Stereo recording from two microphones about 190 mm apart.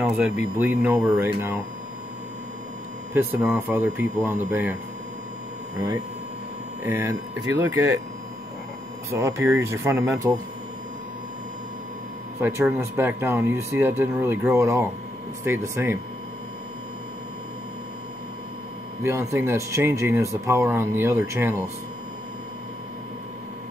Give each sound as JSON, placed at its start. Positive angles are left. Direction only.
{"t": 0.0, "sound": "speech", "side_deg": -5}
{"t": 3.2, "sound": "speech", "side_deg": -10}
{"t": 6.8, "sound": "speech", "side_deg": -15}
{"t": 9.1, "sound": "speech", "side_deg": -15}
{"t": 12.4, "sound": "speech", "side_deg": -10}
{"t": 19.0, "sound": "speech", "side_deg": -15}